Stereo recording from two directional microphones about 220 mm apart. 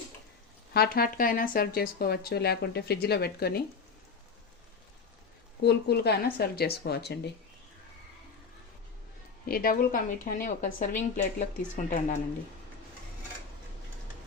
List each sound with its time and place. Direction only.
0.7 s speech: 45° left (ahead or behind)
5.6 s speech: 50° left (ahead or behind)
9.5 s a woman's voice: 40° left (ahead or behind)